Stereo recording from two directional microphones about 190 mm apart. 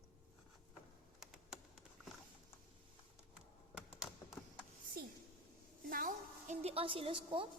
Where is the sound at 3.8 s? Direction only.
5° right (ahead or behind).